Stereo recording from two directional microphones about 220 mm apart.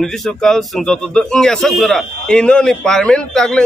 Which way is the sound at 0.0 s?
Centre (ahead or behind).